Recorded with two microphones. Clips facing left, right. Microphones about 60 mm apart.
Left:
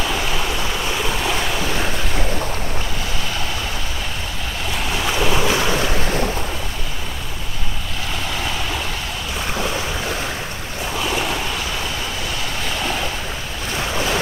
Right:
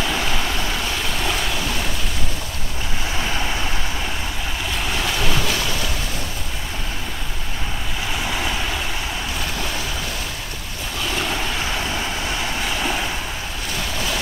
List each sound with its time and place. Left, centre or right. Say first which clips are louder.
5.0 s boat: left 5 dB; centre
5.6 s waves: left 5 dB; left